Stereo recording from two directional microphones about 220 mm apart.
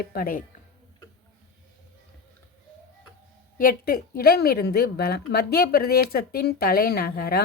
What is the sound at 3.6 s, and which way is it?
Speech, 40° left (ahead or behind).